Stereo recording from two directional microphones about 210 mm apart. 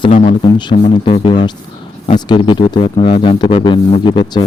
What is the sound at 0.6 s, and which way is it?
A man's voice, 25° left (ahead or behind).